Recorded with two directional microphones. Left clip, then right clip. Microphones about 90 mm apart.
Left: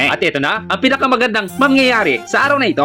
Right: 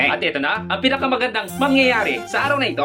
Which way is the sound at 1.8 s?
65° left (ahead or behind).